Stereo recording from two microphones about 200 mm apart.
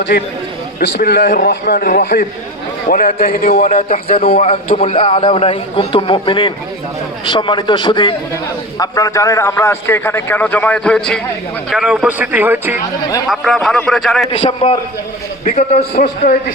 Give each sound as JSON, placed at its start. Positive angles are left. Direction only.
{"t": 0.8, "sound": "a man's voice", "side_deg": 55}
{"t": 14.3, "sound": "a man's voice", "side_deg": 30}